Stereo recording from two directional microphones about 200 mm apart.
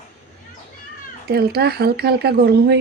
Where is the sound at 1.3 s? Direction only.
50° right (ahead or behind).